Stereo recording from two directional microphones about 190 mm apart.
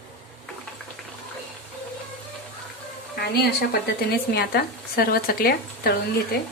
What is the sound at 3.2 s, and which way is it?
A woman's voice, 55° left (ahead or behind).